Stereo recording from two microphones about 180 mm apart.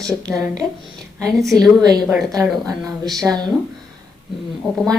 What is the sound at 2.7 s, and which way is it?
Speech, 20° right (ahead or behind).